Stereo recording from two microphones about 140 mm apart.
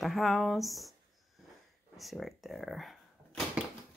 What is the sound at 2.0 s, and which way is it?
Speech, centre (ahead or behind).